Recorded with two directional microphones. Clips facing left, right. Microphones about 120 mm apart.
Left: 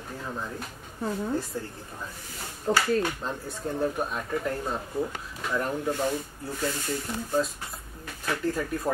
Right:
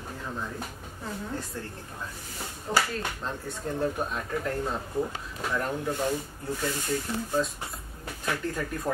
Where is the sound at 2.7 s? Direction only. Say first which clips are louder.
Left 2 dB; 30° left (ahead or behind).